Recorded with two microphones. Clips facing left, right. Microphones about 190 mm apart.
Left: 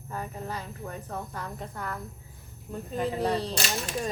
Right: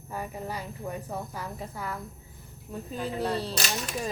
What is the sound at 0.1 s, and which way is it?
A woman's voice, 10° right (ahead or behind).